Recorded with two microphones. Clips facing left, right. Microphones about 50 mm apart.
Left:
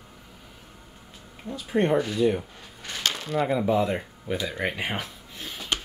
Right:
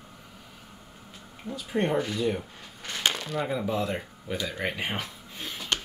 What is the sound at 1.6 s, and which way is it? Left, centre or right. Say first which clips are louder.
Speech: left 4 dB; centre.